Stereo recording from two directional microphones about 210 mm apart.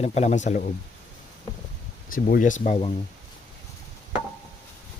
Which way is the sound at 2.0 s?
40° left (ahead or behind).